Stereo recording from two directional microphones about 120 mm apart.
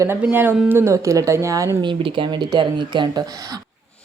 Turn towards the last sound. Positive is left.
turn(degrees=-40)  # may be behind; listen again after turning